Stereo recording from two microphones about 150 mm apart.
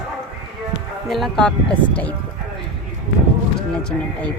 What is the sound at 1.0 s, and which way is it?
Speech, centre (ahead or behind).